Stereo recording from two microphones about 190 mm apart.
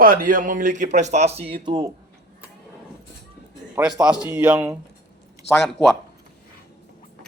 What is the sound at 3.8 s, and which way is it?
Speech, 20° right (ahead or behind).